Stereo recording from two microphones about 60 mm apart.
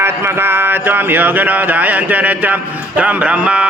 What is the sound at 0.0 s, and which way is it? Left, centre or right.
Mantra, right.